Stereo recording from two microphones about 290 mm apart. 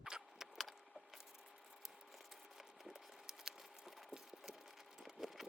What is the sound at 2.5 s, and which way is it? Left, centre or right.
Patter, centre.